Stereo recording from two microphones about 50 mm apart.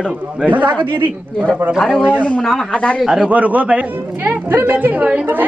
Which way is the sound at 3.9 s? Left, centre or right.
Right.